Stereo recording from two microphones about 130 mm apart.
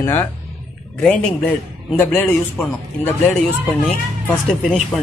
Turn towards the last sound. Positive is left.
turn(degrees=5)  # may be behind; listen again after turning